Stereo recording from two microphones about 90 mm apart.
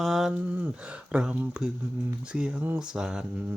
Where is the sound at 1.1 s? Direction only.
10° right (ahead or behind).